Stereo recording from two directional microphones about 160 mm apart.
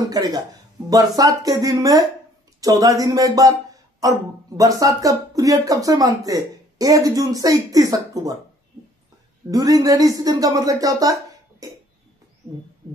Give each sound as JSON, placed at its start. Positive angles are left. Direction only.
{"t": 0.1, "sound": "speech", "side_deg": -25}
{"t": 9.5, "sound": "speech", "side_deg": -20}